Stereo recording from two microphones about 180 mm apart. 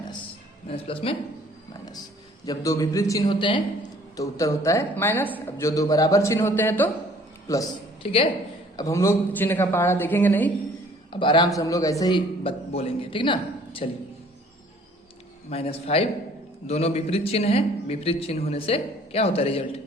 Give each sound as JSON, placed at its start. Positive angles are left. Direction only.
{"t": 0.7, "sound": "a man's voice", "side_deg": 30}
{"t": 2.5, "sound": "a man's voice", "side_deg": 20}
{"t": 8.0, "sound": "a man's voice", "side_deg": 30}
{"t": 8.7, "sound": "a man's voice", "side_deg": 20}
{"t": 11.1, "sound": "a man's voice", "side_deg": 25}
{"t": 15.4, "sound": "a man's voice", "side_deg": 35}